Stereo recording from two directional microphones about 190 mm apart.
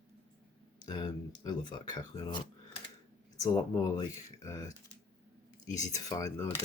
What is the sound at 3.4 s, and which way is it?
Speech, 15° left (ahead or behind).